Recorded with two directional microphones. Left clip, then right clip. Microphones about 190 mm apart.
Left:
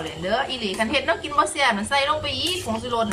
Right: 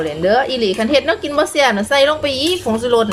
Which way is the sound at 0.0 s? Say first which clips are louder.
Right 10 dB; 30° right (ahead or behind).